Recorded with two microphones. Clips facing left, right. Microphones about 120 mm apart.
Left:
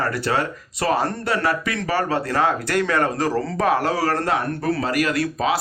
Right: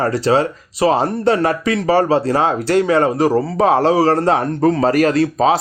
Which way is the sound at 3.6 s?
25° right (ahead or behind).